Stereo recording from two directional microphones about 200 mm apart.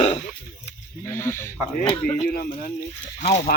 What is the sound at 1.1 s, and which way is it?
Speech, 10° left (ahead or behind).